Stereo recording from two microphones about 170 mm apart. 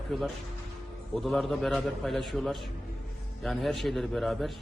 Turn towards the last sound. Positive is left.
turn(degrees=0)  # may be behind; listen again after turning